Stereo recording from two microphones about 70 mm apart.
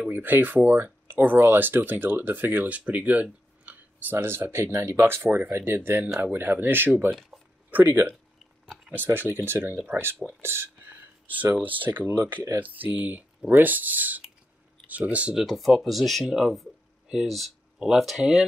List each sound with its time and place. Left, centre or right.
0.0 s speech: right
15.3 s speech: centre